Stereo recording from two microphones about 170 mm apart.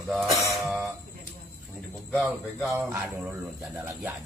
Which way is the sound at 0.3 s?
20° right (ahead or behind).